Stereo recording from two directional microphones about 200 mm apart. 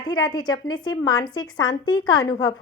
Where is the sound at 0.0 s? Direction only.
20° left (ahead or behind).